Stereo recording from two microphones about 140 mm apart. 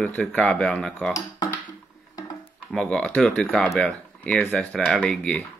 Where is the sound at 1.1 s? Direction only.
25° left (ahead or behind).